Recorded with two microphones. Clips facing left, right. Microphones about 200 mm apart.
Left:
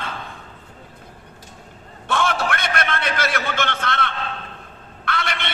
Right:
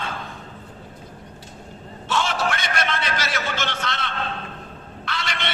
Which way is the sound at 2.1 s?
55° left (ahead or behind).